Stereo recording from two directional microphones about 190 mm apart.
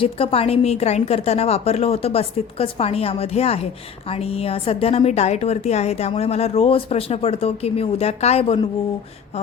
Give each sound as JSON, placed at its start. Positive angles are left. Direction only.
{"t": 0.0, "sound": "a woman's voice", "side_deg": 30}